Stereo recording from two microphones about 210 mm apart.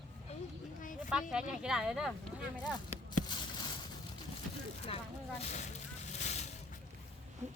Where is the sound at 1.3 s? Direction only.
5° right (ahead or behind).